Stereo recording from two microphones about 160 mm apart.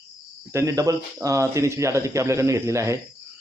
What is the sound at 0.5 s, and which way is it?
Speech, 20° right (ahead or behind).